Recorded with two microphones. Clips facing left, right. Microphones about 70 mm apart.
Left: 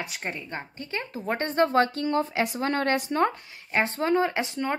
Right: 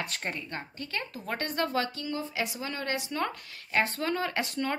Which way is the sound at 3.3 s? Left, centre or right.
Left.